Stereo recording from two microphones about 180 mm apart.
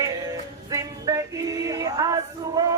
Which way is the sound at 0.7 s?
20° right (ahead or behind).